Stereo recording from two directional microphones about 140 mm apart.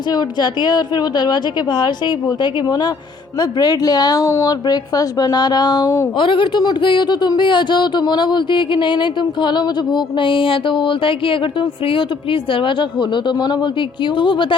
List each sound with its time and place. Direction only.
0.1 s a woman's voice: 30° left (ahead or behind)